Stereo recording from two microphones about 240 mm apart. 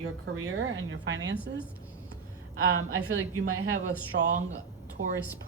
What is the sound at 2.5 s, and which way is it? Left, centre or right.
A woman's voice, right.